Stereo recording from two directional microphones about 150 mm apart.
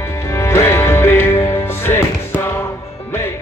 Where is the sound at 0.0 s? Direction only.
20° left (ahead or behind).